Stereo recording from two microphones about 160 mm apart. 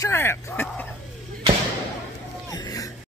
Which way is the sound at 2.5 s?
20° left (ahead or behind).